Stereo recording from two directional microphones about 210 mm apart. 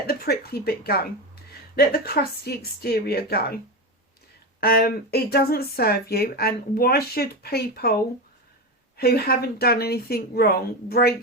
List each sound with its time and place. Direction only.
0.1 s speech: 45° left (ahead or behind)
4.6 s speech: 50° left (ahead or behind)
9.0 s speech: 45° left (ahead or behind)